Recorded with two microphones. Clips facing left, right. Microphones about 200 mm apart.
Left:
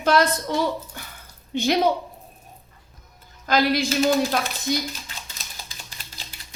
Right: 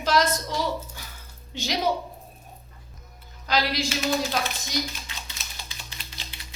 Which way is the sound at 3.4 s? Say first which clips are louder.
Left 5 dB; 50° left (ahead or behind).